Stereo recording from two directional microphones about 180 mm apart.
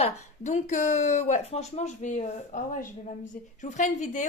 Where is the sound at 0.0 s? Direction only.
40° left (ahead or behind).